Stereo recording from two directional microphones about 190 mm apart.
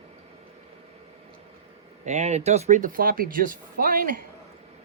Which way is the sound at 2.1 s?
35° right (ahead or behind).